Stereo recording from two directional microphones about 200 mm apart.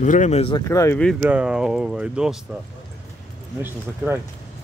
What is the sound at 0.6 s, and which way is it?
Speech, 15° left (ahead or behind).